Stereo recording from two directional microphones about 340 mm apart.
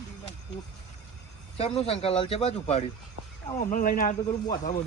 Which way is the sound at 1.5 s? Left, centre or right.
Centre.